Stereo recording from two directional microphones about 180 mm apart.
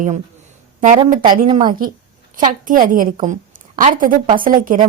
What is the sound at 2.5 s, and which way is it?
Speech, 45° right (ahead or behind).